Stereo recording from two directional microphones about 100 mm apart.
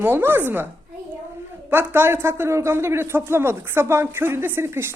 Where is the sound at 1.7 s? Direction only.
20° right (ahead or behind).